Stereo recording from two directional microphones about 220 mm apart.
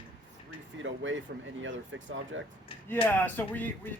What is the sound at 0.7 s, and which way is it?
Speech, 60° right (ahead or behind).